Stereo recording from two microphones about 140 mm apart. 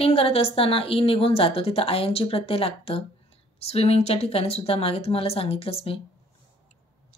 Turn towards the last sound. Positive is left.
turn(degrees=40)  # may be behind; listen again after turning